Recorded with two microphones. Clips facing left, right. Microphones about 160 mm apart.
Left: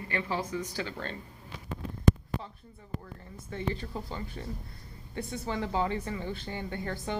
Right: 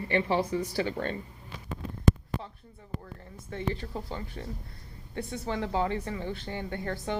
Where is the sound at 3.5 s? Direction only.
60° right (ahead or behind).